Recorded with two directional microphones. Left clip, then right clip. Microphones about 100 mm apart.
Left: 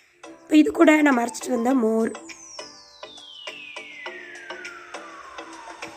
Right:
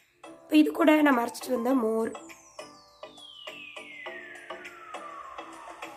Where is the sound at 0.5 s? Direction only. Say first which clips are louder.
Left 5 dB; 45° left (ahead or behind).